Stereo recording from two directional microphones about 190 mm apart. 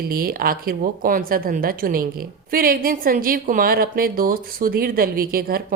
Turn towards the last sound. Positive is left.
turn(degrees=-50)  # may be behind; listen again after turning